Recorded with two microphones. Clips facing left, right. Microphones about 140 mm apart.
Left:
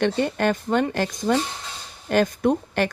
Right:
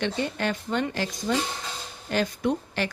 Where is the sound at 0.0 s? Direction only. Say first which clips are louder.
Left 6 dB; 50° left (ahead or behind).